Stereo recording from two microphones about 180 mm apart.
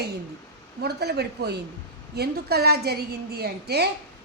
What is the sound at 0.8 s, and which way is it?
A woman's voice, 65° right (ahead or behind).